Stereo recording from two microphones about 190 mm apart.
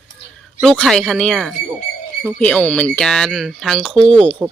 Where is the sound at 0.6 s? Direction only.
Centre (ahead or behind).